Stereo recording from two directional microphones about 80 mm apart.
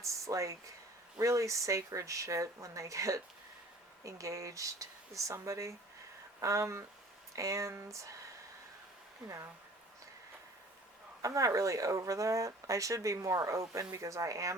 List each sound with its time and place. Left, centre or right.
0.0 s a sound: right
1.2 s speech: right
11.2 s speech: right